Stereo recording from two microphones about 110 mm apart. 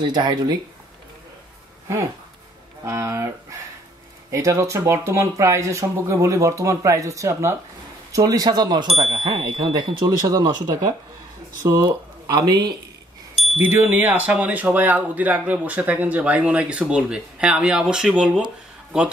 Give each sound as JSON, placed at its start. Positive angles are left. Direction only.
{"t": 0.0, "sound": "speech", "side_deg": -40}
{"t": 2.8, "sound": "speech", "side_deg": -25}
{"t": 13.6, "sound": "speech", "side_deg": -20}